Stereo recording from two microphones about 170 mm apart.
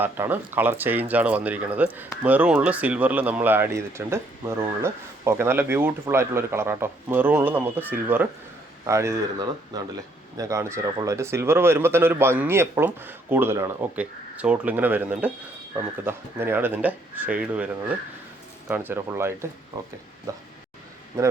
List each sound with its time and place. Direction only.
0.0 s speech: 10° right (ahead or behind)